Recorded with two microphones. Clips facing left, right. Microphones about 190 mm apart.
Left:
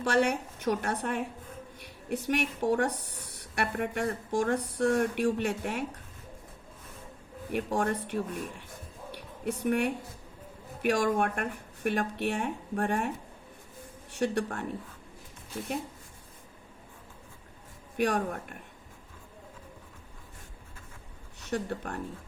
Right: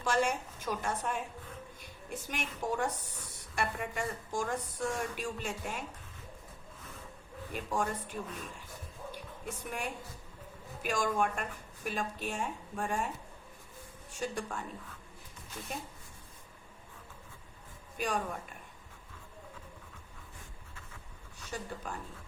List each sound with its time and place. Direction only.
0.0 s a woman's voice: 65° left (ahead or behind)
7.5 s a woman's voice: 65° left (ahead or behind)
9.1 s a sound: 65° left (ahead or behind)
10.8 s speech: 65° left (ahead or behind)
14.1 s speech: 65° left (ahead or behind)
17.9 s speech: 65° left (ahead or behind)
21.5 s speech: 65° left (ahead or behind)